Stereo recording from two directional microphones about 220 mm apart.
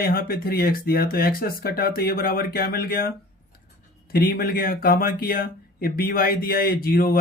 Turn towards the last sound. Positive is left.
turn(degrees=40)  # may be behind; listen again after turning